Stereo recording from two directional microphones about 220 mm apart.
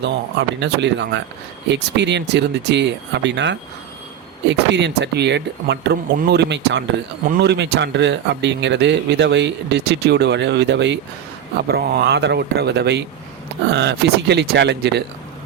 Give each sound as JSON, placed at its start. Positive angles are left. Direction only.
{"t": 0.0, "sound": "speech", "side_deg": -55}